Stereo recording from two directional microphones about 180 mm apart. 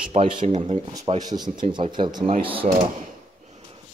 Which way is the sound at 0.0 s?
30° right (ahead or behind).